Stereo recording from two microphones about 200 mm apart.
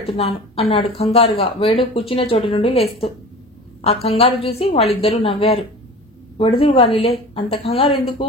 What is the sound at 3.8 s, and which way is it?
A woman's voice, 30° left (ahead or behind).